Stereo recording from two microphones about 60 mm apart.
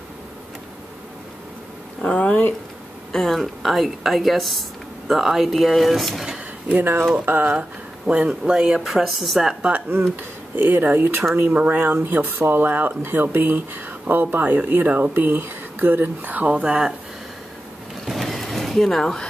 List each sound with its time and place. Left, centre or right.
2.0 s speech: centre
3.1 s speech: centre
6.7 s speech: right
8.1 s speech: centre
9.6 s speech: right
9.8 s speech: right
16.5 s speech: centre
18.0 s vehicle: centre